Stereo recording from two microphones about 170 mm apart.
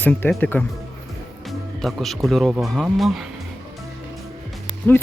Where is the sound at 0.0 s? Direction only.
10° left (ahead or behind).